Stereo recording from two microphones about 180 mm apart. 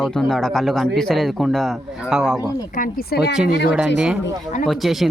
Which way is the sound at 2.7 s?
55° left (ahead or behind).